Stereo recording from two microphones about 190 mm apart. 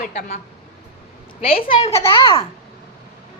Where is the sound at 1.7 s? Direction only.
30° left (ahead or behind).